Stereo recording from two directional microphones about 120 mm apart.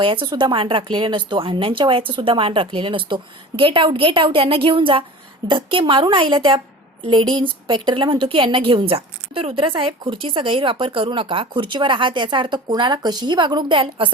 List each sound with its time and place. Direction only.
0.0 s a woman's voice: 45° right (ahead or behind)